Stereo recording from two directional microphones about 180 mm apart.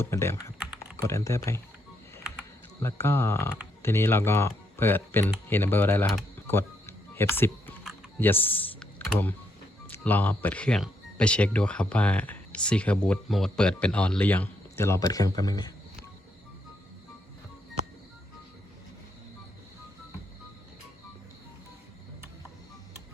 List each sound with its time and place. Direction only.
0.0 s speech: 15° left (ahead or behind)
2.8 s speech: 15° left (ahead or behind)
6.5 s a sound: 15° left (ahead or behind)
8.2 s speech: 10° left (ahead or behind)